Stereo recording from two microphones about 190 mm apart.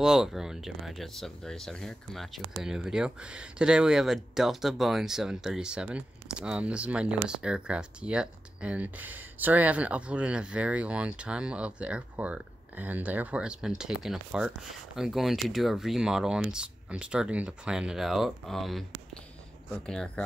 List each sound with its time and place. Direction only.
0.0 s speech: 5° right (ahead or behind)
19.9 s speech: 5° left (ahead or behind)